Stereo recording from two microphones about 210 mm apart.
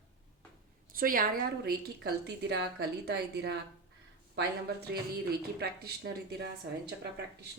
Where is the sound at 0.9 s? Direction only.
45° right (ahead or behind).